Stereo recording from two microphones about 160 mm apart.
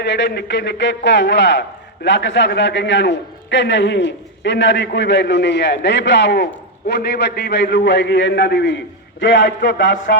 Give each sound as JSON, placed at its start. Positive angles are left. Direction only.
{"t": 0.0, "sound": "a man's voice", "side_deg": 90}